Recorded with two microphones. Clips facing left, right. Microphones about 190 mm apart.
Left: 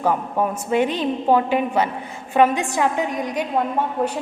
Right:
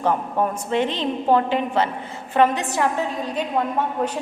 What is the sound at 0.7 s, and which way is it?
A woman's voice, 10° left (ahead or behind).